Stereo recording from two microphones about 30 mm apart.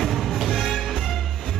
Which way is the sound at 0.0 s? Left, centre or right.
Centre.